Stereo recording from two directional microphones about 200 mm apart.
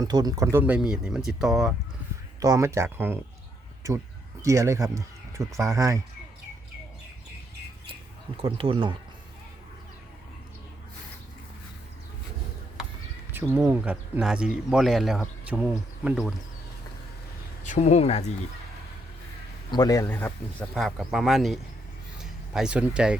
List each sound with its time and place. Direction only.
0.0 s speech: 20° right (ahead or behind); by 1.7 s centre (ahead or behind)
2.4 s speech: 15° right (ahead or behind)
4.4 s speech: 15° right (ahead or behind)
8.4 s speech: 25° right (ahead or behind)
13.3 s speech: 10° right (ahead or behind)
17.6 s speech: 35° left (ahead or behind)
19.7 s speech: 20° left (ahead or behind); by 23.1 s 5° right (ahead or behind)